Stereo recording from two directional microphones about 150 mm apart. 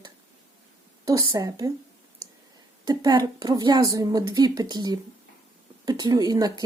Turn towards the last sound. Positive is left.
turn(degrees=-25)  # may be behind; listen again after turning